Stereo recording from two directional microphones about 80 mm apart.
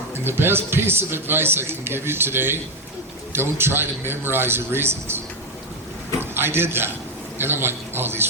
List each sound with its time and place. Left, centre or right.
0.1 s a man's voice: right